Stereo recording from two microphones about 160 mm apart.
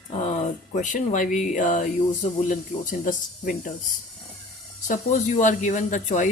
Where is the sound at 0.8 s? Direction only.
50° left (ahead or behind).